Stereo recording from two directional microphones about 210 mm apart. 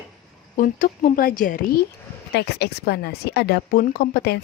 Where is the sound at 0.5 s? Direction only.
40° left (ahead or behind).